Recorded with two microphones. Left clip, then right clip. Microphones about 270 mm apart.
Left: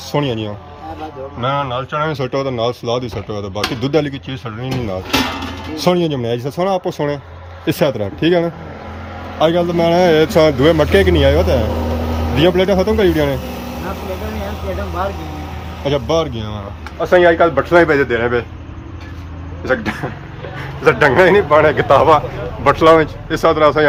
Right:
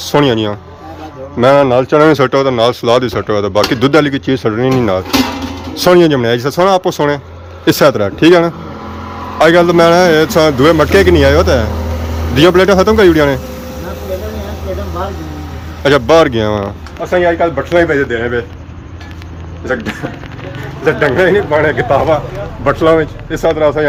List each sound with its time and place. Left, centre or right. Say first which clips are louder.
0.0 s speech: right 8 dB; centre
1.5 s a man's voice: right 12 dB; right
1.9 s speech: right 11 dB; centre
4.3 s a man's voice: right 13 dB; centre
15.8 s speech: right 9 dB; centre
17.0 s speech: left 1 dB; centre
19.6 s a man's voice: right 1 dB; centre